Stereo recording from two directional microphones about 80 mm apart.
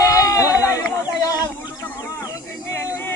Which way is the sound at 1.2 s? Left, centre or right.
Left.